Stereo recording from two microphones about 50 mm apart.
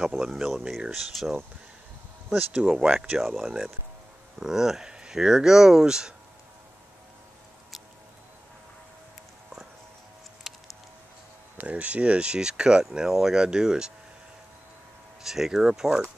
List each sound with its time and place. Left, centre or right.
0.0 s speech: centre
2.5 s speech: centre
3.2 s speech: centre
10.4 s a sound: centre
11.6 s speech: right
15.2 s speech: centre